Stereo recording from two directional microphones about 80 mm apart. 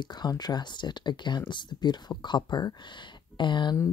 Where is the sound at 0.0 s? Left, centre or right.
Left.